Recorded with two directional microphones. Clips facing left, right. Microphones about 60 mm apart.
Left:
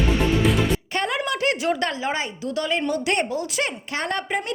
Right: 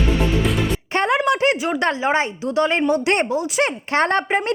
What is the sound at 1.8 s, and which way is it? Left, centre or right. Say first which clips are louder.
A woman's voice: right 6 dB; right.